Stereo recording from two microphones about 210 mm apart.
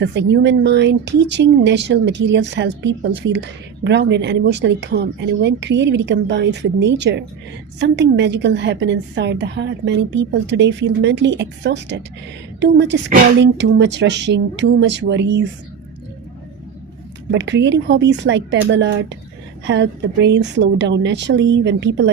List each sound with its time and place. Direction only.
0.0 s a woman's voice: 55° right (ahead or behind)
17.3 s speech: 60° right (ahead or behind)